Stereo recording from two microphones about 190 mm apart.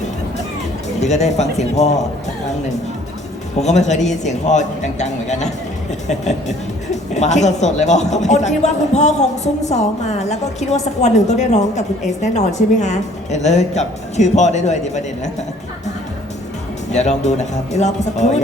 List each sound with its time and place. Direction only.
1.0 s speech: 35° left (ahead or behind)
3.6 s speech: 35° left (ahead or behind)
6.9 s speech: 35° left (ahead or behind)
16.9 s speech: 35° left (ahead or behind)